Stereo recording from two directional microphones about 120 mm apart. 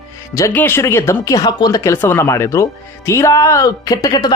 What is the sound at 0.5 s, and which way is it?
A man's voice, 15° left (ahead or behind).